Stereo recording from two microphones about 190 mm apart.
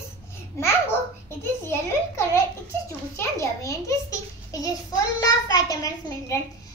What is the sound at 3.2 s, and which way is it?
A child's voice, 15° left (ahead or behind).